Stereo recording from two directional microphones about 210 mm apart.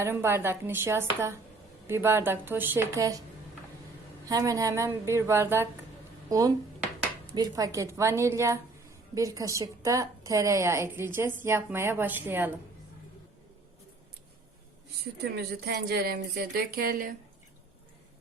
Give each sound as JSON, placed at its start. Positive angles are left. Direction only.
{"t": 0.0, "sound": "a woman's voice", "side_deg": -10}
{"t": 4.3, "sound": "a woman's voice", "side_deg": -15}
{"t": 15.2, "sound": "a woman's voice", "side_deg": -50}